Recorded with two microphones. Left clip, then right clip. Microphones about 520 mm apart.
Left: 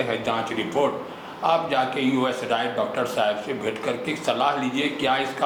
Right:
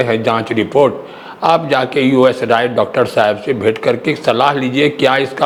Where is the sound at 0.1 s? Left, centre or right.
Right.